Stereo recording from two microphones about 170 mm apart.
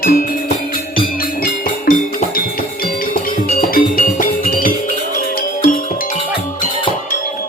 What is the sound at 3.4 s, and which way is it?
Music, 55° left (ahead or behind).